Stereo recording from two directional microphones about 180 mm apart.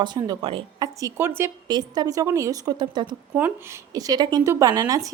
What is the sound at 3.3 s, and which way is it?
Speech, 10° right (ahead or behind).